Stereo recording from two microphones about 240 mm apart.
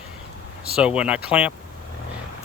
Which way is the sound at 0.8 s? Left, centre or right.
Centre.